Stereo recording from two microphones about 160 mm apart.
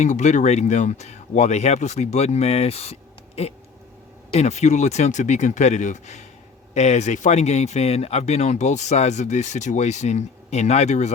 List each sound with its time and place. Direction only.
0.0 s speech: 45° left (ahead or behind)